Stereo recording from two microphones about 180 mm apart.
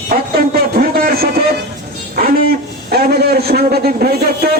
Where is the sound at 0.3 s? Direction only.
55° right (ahead or behind).